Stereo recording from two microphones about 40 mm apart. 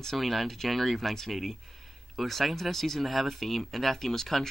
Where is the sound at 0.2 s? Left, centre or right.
Centre.